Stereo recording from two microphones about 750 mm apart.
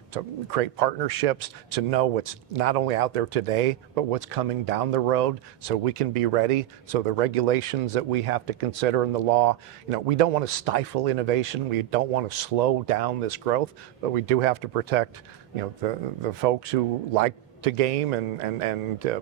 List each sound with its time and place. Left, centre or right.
0.1 s speech: right